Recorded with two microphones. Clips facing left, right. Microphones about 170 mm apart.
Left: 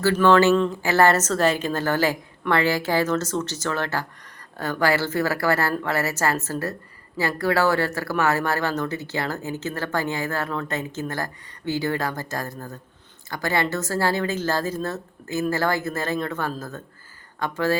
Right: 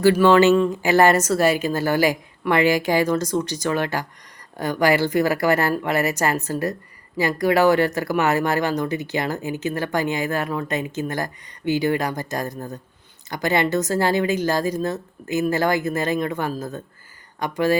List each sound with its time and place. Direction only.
0.0 s speech: 15° right (ahead or behind)